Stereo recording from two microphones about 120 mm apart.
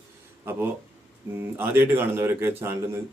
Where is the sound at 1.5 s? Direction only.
20° right (ahead or behind).